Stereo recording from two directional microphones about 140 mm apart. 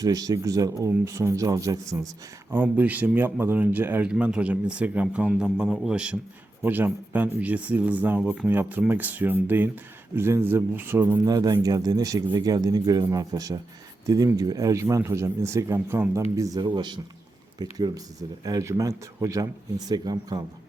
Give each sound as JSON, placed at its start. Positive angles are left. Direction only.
{"t": 0.0, "sound": "speech", "side_deg": -25}
{"t": 2.5, "sound": "speech", "side_deg": -15}
{"t": 11.3, "sound": "speech", "side_deg": -25}